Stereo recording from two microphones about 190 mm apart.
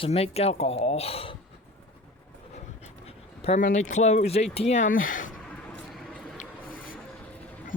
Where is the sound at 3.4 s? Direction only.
40° left (ahead or behind).